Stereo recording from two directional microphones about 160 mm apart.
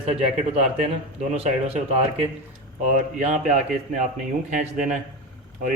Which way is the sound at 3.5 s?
50° right (ahead or behind).